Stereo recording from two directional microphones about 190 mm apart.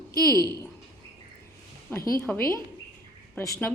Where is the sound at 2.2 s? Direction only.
10° left (ahead or behind).